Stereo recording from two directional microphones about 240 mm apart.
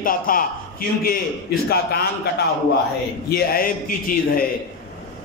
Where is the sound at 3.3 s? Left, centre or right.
Left.